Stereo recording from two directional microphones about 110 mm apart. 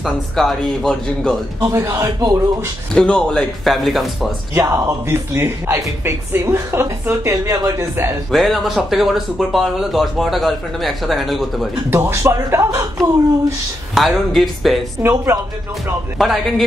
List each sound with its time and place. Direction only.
0.0 s speech: 5° left (ahead or behind)
1.6 s speech: 25° right (ahead or behind)
2.9 s speech: 5° left (ahead or behind)
4.6 s speech: 25° right (ahead or behind)
8.3 s speech: centre (ahead or behind)
11.9 s speech: 25° right (ahead or behind)
13.9 s speech: centre (ahead or behind)
16.2 s speech: centre (ahead or behind)